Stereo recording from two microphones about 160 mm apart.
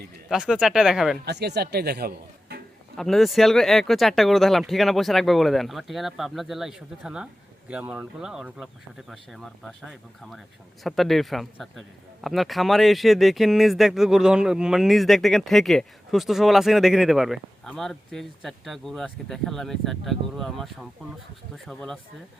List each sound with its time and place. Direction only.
0.3 s a man's voice: 5° right (ahead or behind)
1.2 s speech: 90° right
2.9 s a man's voice: centre (ahead or behind)